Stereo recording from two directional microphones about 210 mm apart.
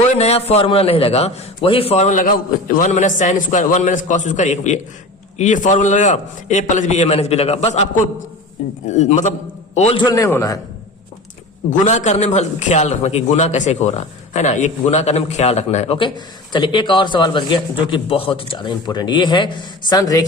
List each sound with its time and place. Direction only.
0.2 s a man's voice: 30° left (ahead or behind)
8.9 s a man's voice: 35° left (ahead or behind); by 10.6 s 15° left (ahead or behind)
11.7 s a man's voice: 35° left (ahead or behind); by 20.2 s 15° left (ahead or behind)